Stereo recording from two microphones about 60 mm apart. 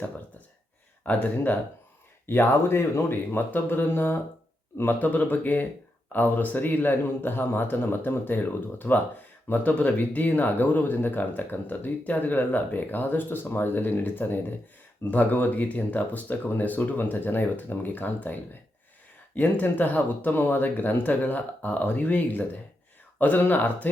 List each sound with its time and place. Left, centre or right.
1.0 s speech: left